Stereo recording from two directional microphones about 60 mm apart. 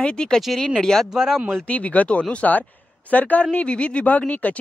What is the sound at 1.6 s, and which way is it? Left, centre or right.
Speech, left.